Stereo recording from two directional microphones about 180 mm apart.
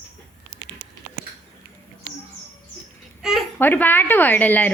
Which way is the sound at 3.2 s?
5° right (ahead or behind).